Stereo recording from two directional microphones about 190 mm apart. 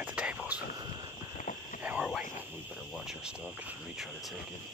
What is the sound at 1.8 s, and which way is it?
Whispering, 5° right (ahead or behind).